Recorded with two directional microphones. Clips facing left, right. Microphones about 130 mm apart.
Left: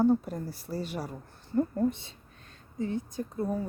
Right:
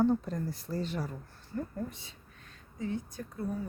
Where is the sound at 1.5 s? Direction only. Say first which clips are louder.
Left 10 dB; 30° left (ahead or behind).